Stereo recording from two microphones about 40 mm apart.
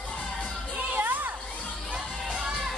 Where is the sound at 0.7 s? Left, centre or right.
Right.